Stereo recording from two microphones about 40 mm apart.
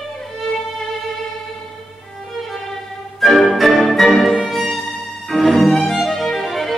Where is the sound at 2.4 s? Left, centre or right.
Centre.